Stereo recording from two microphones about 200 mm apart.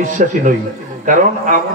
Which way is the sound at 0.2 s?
40° right (ahead or behind).